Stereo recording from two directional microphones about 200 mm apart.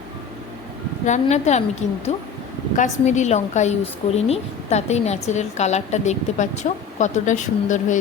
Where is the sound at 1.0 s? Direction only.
35° left (ahead or behind).